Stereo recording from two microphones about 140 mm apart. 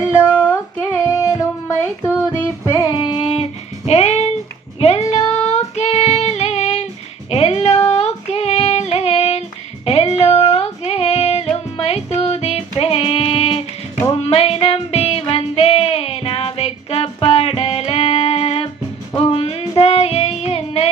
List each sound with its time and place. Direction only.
0.3 s female singing: 10° left (ahead or behind)
2.7 s music: 30° left (ahead or behind)
3.8 s a sound: 50° left (ahead or behind)
4.8 s female singing: 45° left (ahead or behind)
9.8 s music: 45° left (ahead or behind)
19.1 s child singing: 45° left (ahead or behind)